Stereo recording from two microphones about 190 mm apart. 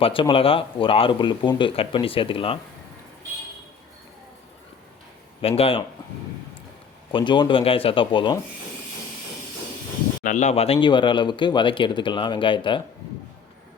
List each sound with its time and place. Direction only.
0.0 s speech: 25° left (ahead or behind)
5.4 s speech: 30° left (ahead or behind)
7.1 s speech: 25° left (ahead or behind)
10.2 s speech: 40° left (ahead or behind)